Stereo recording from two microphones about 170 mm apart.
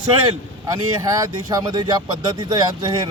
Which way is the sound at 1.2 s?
20° right (ahead or behind).